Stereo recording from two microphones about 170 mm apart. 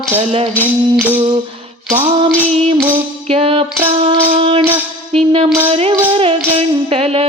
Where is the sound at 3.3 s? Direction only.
35° right (ahead or behind).